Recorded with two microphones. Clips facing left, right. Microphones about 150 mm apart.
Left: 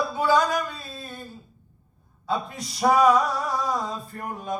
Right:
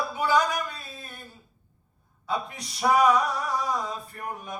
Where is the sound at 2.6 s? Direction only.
30° left (ahead or behind).